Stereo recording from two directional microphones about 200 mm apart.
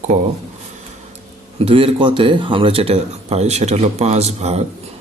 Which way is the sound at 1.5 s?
30° right (ahead or behind).